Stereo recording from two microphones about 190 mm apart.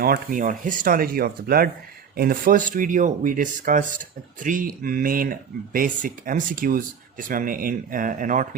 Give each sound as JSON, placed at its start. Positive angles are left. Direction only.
{"t": 0.0, "sound": "speech", "side_deg": -50}